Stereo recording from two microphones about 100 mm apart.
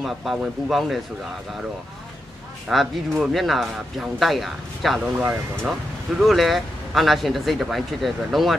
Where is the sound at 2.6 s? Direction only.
Centre (ahead or behind).